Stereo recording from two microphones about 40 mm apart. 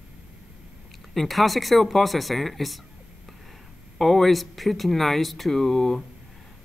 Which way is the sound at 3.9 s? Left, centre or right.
Centre.